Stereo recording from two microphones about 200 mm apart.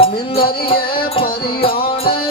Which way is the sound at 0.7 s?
25° left (ahead or behind).